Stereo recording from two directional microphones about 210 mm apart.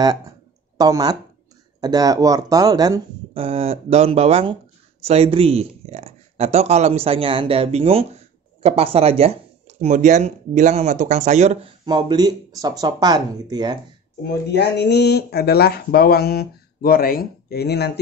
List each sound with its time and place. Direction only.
0.7 s speech: 15° right (ahead or behind); by 11.7 s 30° right (ahead or behind)
11.8 s speech: 20° right (ahead or behind)
14.5 s speech: 55° left (ahead or behind)